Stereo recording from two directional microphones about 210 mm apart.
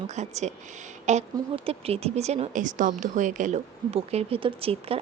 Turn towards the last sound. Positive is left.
turn(degrees=-25)  # may be behind; listen again after turning